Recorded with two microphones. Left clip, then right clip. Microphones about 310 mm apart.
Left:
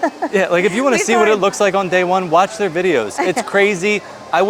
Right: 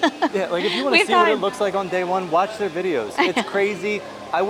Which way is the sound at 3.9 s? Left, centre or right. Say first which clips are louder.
Left 6 dB; left.